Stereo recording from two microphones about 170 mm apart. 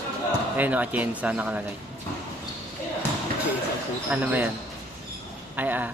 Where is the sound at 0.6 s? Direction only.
10° right (ahead or behind).